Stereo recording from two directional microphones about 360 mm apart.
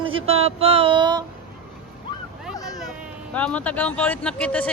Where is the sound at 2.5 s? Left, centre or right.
Centre.